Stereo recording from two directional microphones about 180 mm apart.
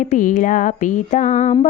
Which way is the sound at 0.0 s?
45° left (ahead or behind).